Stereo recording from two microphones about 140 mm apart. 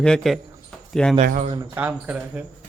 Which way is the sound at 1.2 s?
70° right (ahead or behind).